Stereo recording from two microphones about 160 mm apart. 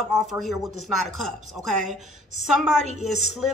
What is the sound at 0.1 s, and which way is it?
Speech, centre (ahead or behind).